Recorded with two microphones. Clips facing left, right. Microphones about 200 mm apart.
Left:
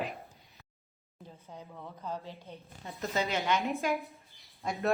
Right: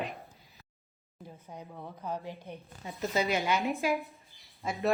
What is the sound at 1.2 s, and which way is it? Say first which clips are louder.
A woman's voice: right 2 dB; 15° right (ahead or behind).